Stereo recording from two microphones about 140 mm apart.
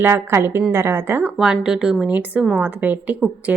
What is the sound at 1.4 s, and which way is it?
A woman's voice, 5° right (ahead or behind).